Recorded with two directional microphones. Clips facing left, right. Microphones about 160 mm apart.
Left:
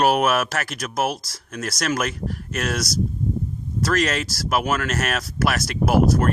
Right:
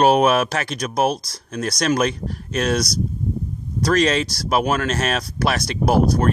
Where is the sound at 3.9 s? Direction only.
20° right (ahead or behind).